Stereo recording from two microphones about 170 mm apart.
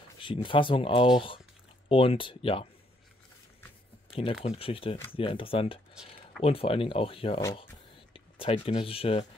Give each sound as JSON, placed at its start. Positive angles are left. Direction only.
{"t": 0.2, "sound": "speech", "side_deg": 30}
{"t": 4.1, "sound": "speech", "side_deg": 35}
{"t": 6.0, "sound": "speech", "side_deg": -5}
{"t": 6.4, "sound": "speech", "side_deg": 35}